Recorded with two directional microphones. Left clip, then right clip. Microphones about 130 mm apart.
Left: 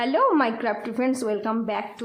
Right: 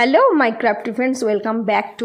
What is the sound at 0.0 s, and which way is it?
A woman's voice, 45° right (ahead or behind).